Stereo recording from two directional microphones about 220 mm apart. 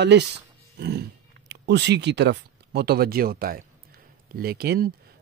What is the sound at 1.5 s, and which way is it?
Speech, 50° right (ahead or behind).